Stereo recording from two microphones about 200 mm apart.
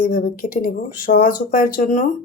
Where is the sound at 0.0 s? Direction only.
45° left (ahead or behind).